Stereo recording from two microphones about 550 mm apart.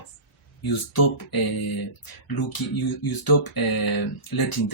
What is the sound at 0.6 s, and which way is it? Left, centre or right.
Speech, left.